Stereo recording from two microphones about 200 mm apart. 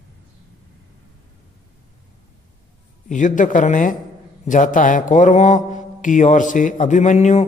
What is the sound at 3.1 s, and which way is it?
Speech, 40° left (ahead or behind).